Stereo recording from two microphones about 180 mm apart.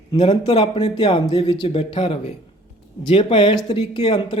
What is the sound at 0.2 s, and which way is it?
Speech, 35° left (ahead or behind).